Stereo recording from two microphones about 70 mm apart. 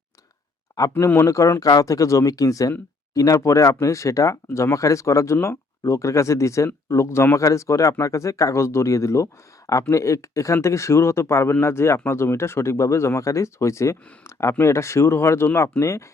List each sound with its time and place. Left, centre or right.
0.9 s speech: left
1.3 s speech: left